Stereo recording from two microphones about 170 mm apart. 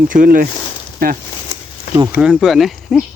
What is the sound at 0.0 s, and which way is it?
Speech, 55° right (ahead or behind).